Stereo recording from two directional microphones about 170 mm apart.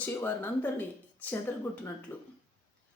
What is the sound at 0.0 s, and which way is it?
Speech, 10° left (ahead or behind).